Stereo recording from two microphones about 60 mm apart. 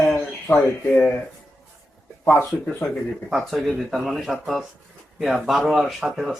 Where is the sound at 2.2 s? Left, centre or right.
Left.